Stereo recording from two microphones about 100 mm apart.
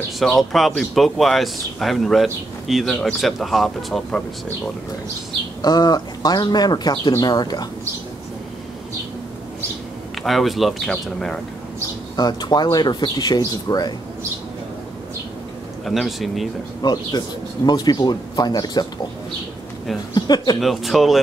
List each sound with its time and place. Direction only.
0.2 s speech: centre (ahead or behind)
5.6 s speech: 40° left (ahead or behind)
10.2 s speech: centre (ahead or behind)
12.2 s speech: 40° left (ahead or behind)
15.8 s speech: centre (ahead or behind)
16.8 s speech: 45° left (ahead or behind)
20.2 s speech: 45° left (ahead or behind)
20.6 s speech: centre (ahead or behind)